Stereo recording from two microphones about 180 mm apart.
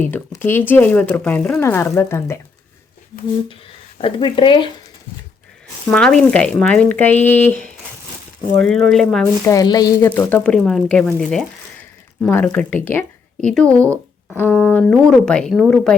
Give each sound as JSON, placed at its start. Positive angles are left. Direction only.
{"t": 0.1, "sound": "speech", "side_deg": 15}
{"t": 3.9, "sound": "speech", "side_deg": 30}
{"t": 5.9, "sound": "speech", "side_deg": 5}
{"t": 8.9, "sound": "speech", "side_deg": 0}
{"t": 9.5, "sound": "speech", "side_deg": 20}